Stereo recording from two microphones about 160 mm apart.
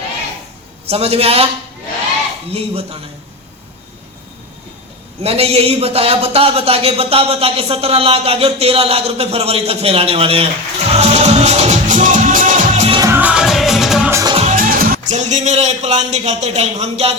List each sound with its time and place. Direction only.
0.9 s a man's voice: 40° right (ahead or behind)
2.5 s a man's voice: 40° right (ahead or behind)
5.2 s speech: 40° right (ahead or behind)
13.1 s music: 10° right (ahead or behind)
14.1 s music: 20° right (ahead or behind)
14.5 s speech: 60° right (ahead or behind); by 17.1 s 40° right (ahead or behind)